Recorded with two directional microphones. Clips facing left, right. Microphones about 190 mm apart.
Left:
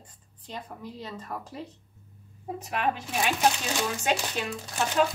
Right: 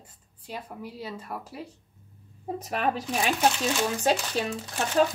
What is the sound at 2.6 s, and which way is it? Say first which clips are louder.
Speech: right 1 dB; 40° right (ahead or behind).